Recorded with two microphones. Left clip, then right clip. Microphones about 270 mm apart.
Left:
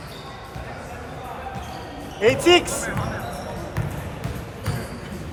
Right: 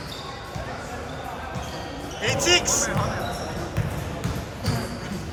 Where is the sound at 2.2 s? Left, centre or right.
Centre.